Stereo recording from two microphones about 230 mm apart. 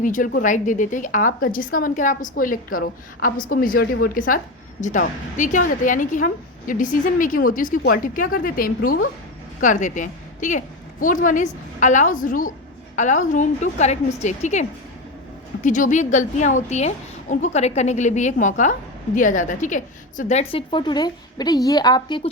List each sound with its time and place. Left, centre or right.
0.0 s a woman's voice: left; by 22.3 s centre